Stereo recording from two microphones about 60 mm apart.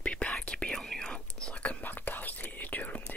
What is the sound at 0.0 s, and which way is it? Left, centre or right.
Whispering, centre.